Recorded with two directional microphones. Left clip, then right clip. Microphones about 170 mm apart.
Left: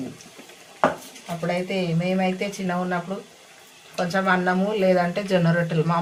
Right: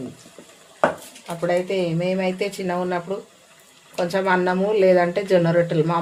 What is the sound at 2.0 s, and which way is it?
Speech, 40° right (ahead or behind).